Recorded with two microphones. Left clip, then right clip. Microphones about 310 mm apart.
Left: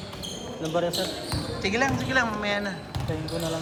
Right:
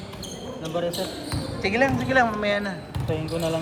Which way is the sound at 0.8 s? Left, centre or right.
Left.